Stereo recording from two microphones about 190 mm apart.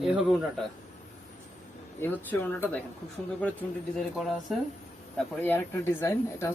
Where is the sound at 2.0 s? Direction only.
10° left (ahead or behind).